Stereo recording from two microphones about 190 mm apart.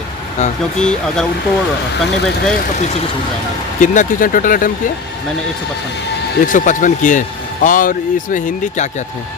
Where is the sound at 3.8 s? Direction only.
40° left (ahead or behind).